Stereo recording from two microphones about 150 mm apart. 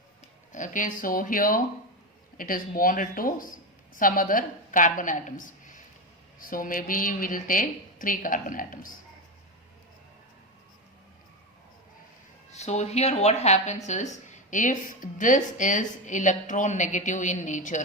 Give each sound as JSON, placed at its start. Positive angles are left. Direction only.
{"t": 0.5, "sound": "a woman's voice", "side_deg": 60}
{"t": 12.5, "sound": "a woman's voice", "side_deg": 45}